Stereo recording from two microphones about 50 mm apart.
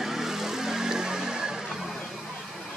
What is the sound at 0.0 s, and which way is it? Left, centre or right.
Vehicle, centre.